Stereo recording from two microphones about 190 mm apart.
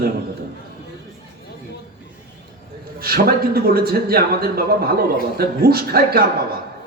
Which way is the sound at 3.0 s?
55° right (ahead or behind).